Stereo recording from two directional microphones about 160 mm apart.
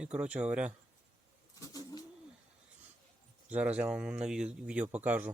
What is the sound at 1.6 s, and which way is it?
Bird, 25° left (ahead or behind).